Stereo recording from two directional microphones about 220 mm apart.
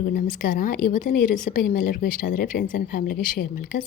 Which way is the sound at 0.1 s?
40° left (ahead or behind).